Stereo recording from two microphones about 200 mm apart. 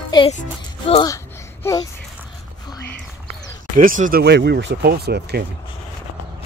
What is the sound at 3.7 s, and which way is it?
Speech, 40° right (ahead or behind).